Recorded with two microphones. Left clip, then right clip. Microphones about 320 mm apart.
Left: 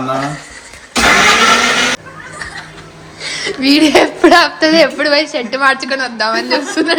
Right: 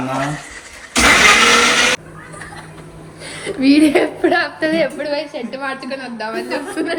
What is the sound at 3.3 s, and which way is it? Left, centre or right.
A woman's voice, centre.